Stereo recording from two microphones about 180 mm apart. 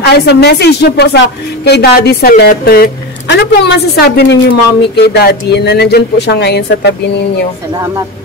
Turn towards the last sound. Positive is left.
turn(degrees=-20)  # may be behind; listen again after turning